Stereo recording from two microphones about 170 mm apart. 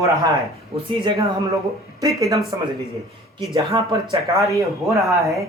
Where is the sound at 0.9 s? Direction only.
30° right (ahead or behind).